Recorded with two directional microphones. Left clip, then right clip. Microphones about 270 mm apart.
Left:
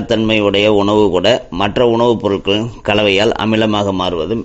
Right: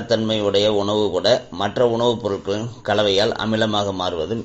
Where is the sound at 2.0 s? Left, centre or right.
Left.